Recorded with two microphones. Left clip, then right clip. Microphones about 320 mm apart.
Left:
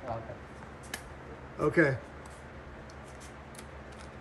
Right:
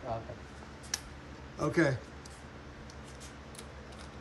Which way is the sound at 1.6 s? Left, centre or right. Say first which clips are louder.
Left 3 dB; centre.